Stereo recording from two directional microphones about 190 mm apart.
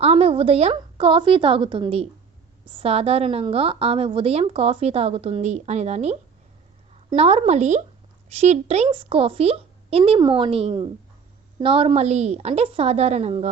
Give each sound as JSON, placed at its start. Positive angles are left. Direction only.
{"t": 0.0, "sound": "a woman's voice", "side_deg": -30}